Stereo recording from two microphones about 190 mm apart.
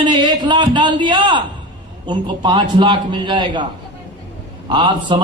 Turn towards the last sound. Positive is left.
turn(degrees=-25)  # may be behind; listen again after turning